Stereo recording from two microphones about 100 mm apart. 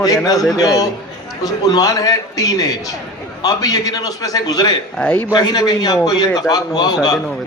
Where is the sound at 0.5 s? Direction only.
40° left (ahead or behind).